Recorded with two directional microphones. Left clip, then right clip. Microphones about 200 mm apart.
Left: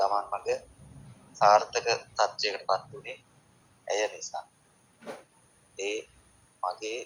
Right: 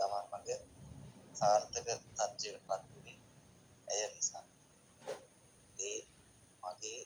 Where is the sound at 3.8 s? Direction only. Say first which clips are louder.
Left 10 dB; 15° left (ahead or behind).